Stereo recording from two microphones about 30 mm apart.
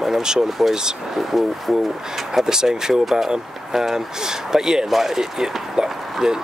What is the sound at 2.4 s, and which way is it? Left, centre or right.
Speech, centre.